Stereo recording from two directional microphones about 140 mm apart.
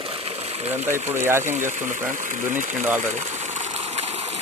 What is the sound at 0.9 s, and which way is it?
Speech, 20° right (ahead or behind).